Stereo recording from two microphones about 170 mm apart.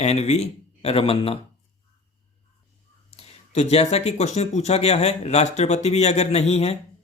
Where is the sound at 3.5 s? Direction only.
40° left (ahead or behind).